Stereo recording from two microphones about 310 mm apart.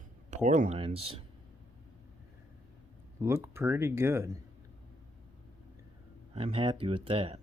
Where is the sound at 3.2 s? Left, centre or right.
Centre.